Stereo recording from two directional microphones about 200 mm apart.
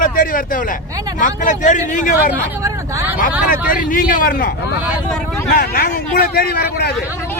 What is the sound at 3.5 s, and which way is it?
Speech, 45° left (ahead or behind).